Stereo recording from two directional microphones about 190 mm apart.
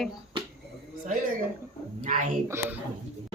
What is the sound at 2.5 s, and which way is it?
Speech, 15° right (ahead or behind).